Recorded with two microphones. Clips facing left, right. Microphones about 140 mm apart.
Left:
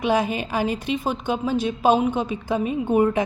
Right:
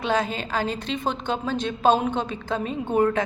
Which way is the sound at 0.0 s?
10° left (ahead or behind).